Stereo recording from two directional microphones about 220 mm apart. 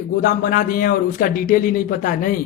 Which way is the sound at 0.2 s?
40° left (ahead or behind).